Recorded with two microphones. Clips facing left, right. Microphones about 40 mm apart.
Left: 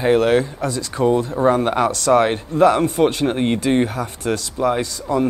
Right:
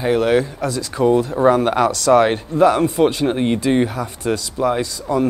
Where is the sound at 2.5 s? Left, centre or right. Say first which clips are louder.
Left 1 dB; centre.